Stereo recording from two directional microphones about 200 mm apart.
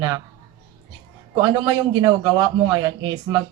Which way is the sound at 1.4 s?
20° right (ahead or behind).